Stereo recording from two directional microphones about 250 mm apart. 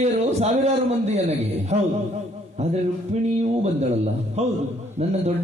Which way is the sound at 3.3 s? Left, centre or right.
Right.